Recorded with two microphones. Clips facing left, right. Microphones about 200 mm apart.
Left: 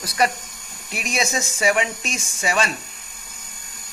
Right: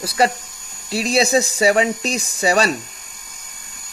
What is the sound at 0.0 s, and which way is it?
Speech, 30° right (ahead or behind).